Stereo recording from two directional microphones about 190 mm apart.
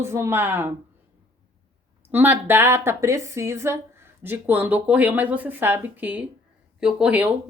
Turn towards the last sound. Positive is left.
turn(degrees=-10)  # may be behind; listen again after turning